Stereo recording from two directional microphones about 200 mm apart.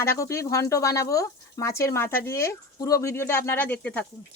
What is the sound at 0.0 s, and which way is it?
Speech, 15° left (ahead or behind).